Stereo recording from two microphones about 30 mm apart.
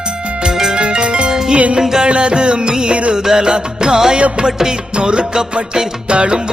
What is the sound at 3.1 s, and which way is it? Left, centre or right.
Music, centre.